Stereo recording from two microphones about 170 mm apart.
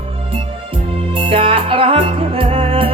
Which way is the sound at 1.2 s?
30° right (ahead or behind).